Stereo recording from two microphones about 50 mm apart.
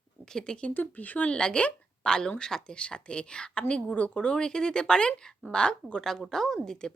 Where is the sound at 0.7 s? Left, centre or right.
Left.